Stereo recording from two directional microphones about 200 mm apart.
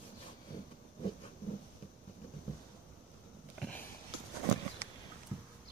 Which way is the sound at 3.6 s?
5° left (ahead or behind).